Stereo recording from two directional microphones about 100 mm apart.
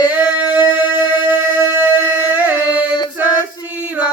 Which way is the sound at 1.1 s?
50° left (ahead or behind).